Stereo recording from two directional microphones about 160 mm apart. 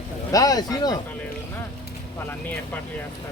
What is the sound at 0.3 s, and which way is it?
Speech, 20° left (ahead or behind).